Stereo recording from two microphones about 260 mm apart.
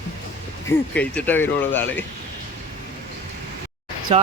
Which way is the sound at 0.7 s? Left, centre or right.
Centre.